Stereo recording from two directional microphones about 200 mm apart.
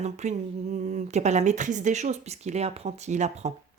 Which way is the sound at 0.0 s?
35° right (ahead or behind).